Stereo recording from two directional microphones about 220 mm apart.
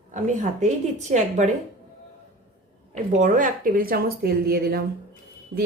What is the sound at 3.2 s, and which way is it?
Speech, 35° right (ahead or behind).